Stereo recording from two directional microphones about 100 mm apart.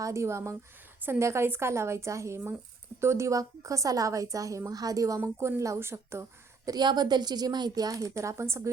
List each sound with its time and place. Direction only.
0.0 s a woman's voice: 30° right (ahead or behind)
6.7 s a woman's voice: 45° right (ahead or behind); by 8.7 s 30° right (ahead or behind)